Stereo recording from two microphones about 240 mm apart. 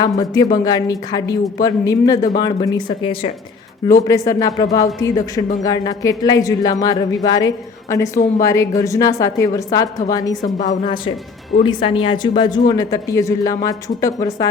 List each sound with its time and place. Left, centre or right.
0.0 s a man's voice: centre